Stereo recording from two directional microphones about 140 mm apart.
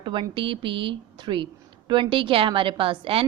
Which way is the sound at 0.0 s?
35° right (ahead or behind).